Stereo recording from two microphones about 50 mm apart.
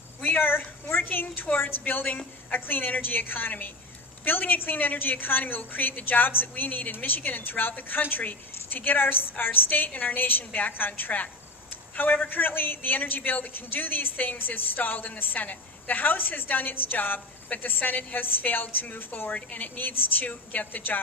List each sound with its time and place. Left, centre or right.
0.2 s a man's voice: left
19.3 s a man's voice: left